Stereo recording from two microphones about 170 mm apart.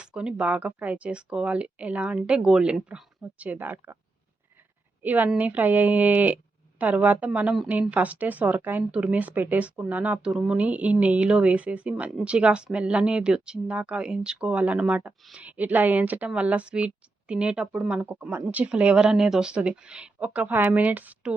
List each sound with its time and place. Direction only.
0.0 s speech: 5° right (ahead or behind)
5.0 s speech: 10° right (ahead or behind)